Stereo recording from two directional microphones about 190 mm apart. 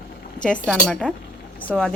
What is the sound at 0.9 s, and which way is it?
A woman's voice, 5° left (ahead or behind).